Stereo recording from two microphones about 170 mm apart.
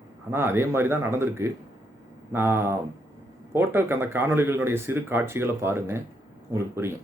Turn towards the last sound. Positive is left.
turn(degrees=-15)  # may be behind; listen again after turning